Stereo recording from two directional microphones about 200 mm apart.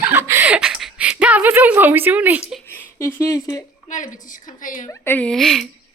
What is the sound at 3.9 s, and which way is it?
A woman's voice, 40° left (ahead or behind).